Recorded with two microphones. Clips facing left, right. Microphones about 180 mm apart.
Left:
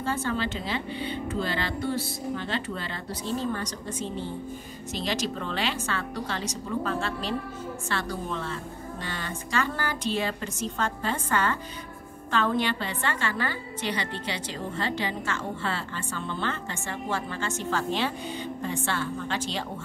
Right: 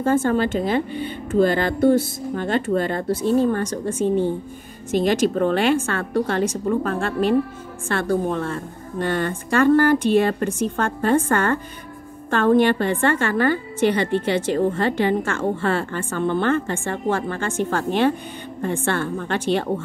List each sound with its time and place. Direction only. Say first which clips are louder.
0.0 s a woman's voice: right 10 dB; 45° right (ahead or behind)